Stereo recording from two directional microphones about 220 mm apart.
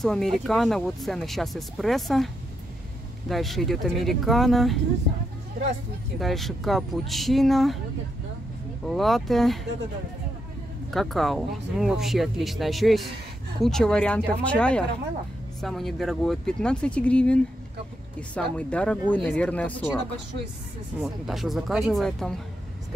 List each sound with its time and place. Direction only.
0.0 s speech: centre (ahead or behind)
6.1 s speech: centre (ahead or behind)
8.8 s speech: centre (ahead or behind)
10.9 s speech: centre (ahead or behind)
21.0 s speech: centre (ahead or behind)